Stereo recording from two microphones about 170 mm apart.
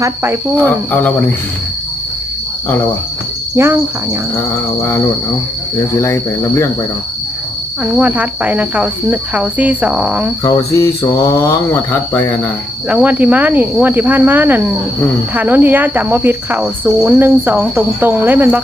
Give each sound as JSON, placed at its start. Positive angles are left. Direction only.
{"t": 0.0, "sound": "speech", "side_deg": -15}
{"t": 0.9, "sound": "speech", "side_deg": 10}
{"t": 3.5, "sound": "speech", "side_deg": -15}
{"t": 4.4, "sound": "speech", "side_deg": 15}
{"t": 7.9, "sound": "speech", "side_deg": -10}
{"t": 10.4, "sound": "speech", "side_deg": 20}
{"t": 12.9, "sound": "speech", "side_deg": -10}